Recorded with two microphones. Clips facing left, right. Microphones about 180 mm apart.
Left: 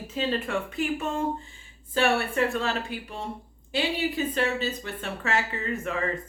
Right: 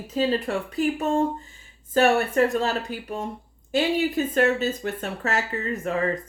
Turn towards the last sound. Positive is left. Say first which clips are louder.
# right 3 dB
turn(degrees=-40)  # may be behind; listen again after turning